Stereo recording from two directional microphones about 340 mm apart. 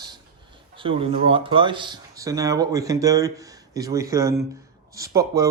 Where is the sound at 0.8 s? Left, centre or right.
Centre.